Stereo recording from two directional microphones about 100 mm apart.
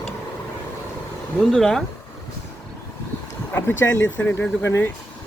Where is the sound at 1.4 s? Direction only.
Centre (ahead or behind).